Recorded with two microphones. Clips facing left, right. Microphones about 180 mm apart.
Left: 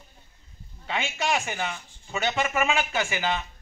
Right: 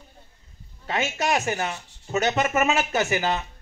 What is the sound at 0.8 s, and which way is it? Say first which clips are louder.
Speech: right 3 dB; 45° right (ahead or behind).